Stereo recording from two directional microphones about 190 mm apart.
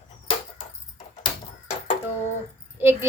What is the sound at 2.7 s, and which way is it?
Speech, 10° right (ahead or behind).